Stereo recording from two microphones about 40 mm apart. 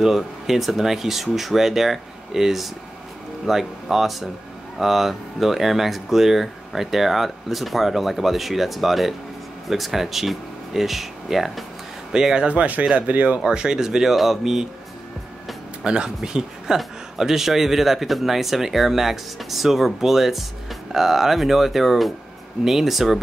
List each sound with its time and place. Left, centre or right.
0.0 s a man's voice: centre
12.1 s a man's voice: centre
12.4 s speech: right
13.4 s a man's voice: centre
15.8 s a man's voice: right; by 23.2 s centre